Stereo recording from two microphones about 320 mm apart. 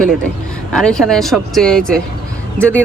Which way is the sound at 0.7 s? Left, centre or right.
Centre.